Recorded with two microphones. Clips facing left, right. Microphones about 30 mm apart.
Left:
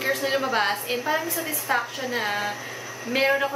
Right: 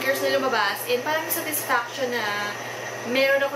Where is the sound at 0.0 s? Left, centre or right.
Centre.